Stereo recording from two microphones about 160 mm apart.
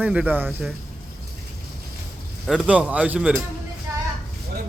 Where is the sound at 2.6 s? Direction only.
10° right (ahead or behind).